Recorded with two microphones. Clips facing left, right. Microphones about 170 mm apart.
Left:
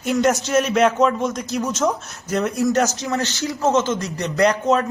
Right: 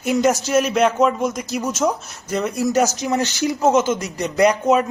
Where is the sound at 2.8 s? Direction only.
15° right (ahead or behind).